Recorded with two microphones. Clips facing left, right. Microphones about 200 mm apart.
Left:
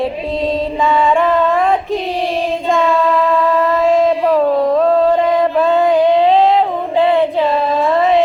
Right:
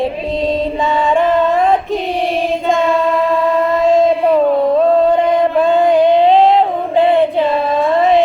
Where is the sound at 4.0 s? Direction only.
25° right (ahead or behind).